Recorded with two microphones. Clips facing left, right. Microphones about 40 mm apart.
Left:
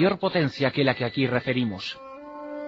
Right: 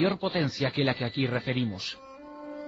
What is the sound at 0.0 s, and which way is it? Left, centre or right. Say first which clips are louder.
A man's voice: left 5 dB; left.